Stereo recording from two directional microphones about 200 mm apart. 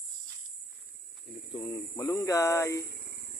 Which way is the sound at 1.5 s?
15° left (ahead or behind).